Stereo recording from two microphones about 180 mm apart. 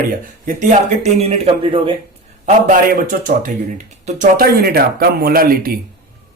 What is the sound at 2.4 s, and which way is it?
A man's voice, 50° right (ahead or behind).